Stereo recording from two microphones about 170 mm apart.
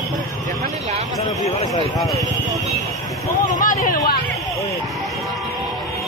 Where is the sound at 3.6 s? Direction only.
55° left (ahead or behind).